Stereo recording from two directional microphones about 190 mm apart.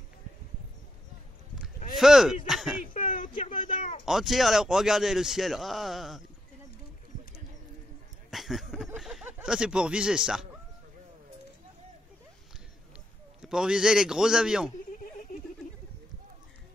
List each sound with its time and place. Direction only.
2.0 s speech: centre (ahead or behind)
2.9 s a sound: 45° left (ahead or behind)
3.6 s speech: 30° left (ahead or behind)
4.0 s a man's voice: centre (ahead or behind)
8.3 s a sound: centre (ahead or behind)
13.4 s a man's voice: 5° right (ahead or behind)